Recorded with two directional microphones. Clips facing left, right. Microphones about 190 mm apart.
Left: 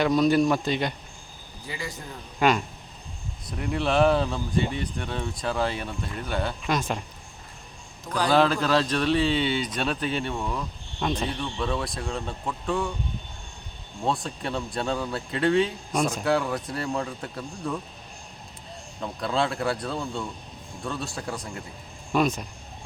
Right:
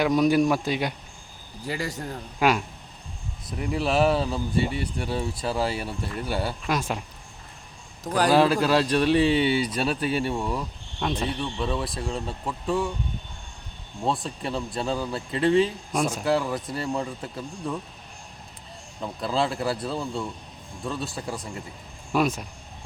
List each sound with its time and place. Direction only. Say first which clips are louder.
0.0 s speech: even; 10° right (ahead or behind)
1.6 s speech: right 6 dB; 40° right (ahead or behind)
2.4 s speech: even; 5° right (ahead or behind)
8.0 s a man's voice: right 4 dB; 45° right (ahead or behind)
8.3 s speech: right 1 dB; 10° right (ahead or behind)
14.0 s speech: even; centre (ahead or behind)
18.9 s speech: even; centre (ahead or behind)